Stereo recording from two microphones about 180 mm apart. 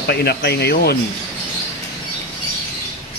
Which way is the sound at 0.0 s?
65° left (ahead or behind).